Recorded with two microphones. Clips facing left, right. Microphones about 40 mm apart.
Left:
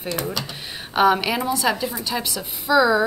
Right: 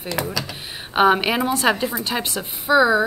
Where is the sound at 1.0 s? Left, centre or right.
Right.